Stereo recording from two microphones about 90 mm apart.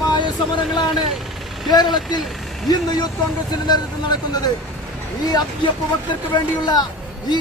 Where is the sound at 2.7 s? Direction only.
50° left (ahead or behind).